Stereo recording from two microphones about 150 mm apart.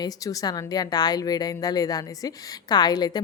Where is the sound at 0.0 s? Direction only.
25° left (ahead or behind).